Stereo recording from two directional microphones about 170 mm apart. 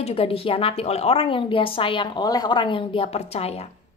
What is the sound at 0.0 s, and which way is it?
A woman's voice, 35° left (ahead or behind).